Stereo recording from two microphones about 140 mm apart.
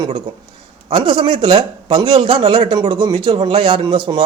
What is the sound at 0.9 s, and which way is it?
A man's voice, 35° right (ahead or behind).